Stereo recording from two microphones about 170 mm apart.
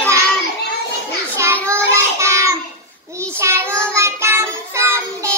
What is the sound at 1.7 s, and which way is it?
Child singing, 15° right (ahead or behind).